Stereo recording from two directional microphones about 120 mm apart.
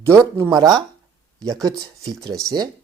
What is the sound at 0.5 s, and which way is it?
Speech, 35° right (ahead or behind).